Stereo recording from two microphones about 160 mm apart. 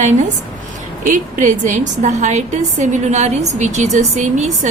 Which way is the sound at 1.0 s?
55° right (ahead or behind).